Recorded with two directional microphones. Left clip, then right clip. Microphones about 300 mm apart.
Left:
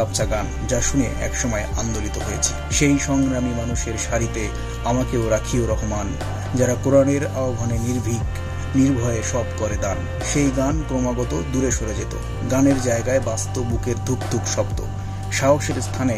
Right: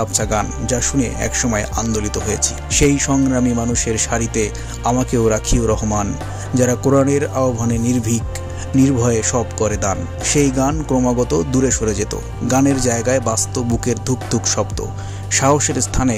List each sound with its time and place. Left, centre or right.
0.1 s speech: right